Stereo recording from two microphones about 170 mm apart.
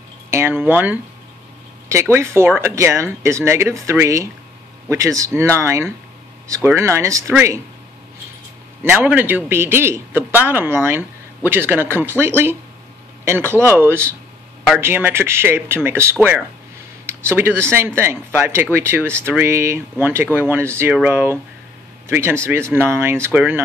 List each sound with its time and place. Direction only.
0.3 s a man's voice: 15° right (ahead or behind)
8.8 s a man's voice: 10° right (ahead or behind)